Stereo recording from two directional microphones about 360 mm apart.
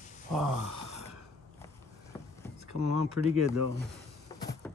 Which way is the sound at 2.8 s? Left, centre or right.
Right.